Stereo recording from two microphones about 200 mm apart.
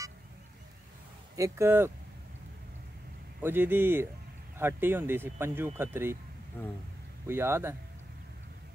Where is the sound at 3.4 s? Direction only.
10° right (ahead or behind).